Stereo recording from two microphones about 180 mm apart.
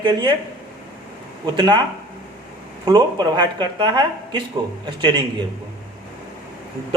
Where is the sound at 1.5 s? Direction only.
25° right (ahead or behind).